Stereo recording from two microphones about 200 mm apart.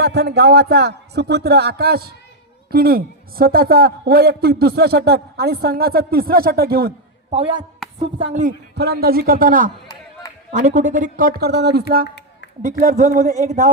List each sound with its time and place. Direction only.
0.0 s a man's voice: 55° right (ahead or behind)
7.3 s a woman's voice: 30° right (ahead or behind)
8.7 s a man's voice: 55° right (ahead or behind)
12.6 s speech: 40° right (ahead or behind)